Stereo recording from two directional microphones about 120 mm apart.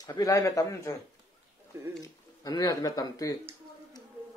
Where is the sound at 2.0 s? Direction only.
30° left (ahead or behind).